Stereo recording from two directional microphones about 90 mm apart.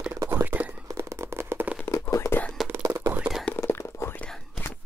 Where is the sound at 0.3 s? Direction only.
20° right (ahead or behind).